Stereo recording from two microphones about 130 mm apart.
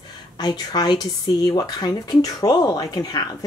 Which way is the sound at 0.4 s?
30° left (ahead or behind).